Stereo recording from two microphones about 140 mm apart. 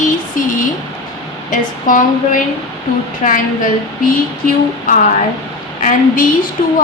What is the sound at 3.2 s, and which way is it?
Speech, 60° left (ahead or behind).